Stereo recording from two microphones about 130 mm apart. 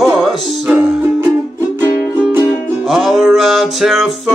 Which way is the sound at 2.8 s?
Centre (ahead or behind).